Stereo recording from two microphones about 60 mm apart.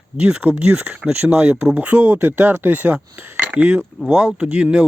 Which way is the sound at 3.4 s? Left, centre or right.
Right.